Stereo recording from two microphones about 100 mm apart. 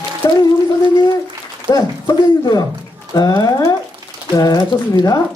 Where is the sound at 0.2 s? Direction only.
35° left (ahead or behind).